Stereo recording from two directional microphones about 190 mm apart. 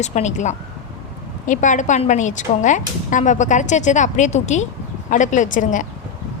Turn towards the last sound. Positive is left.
turn(degrees=45)  # may be behind; listen again after turning